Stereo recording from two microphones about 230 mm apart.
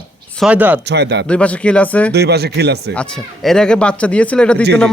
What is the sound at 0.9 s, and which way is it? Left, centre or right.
Speech, right.